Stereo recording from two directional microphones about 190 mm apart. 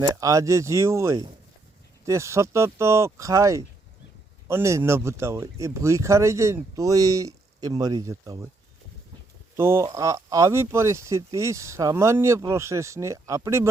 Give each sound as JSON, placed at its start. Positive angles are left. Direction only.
{"t": 0.1, "sound": "speech", "side_deg": -15}
{"t": 9.6, "sound": "speech", "side_deg": -15}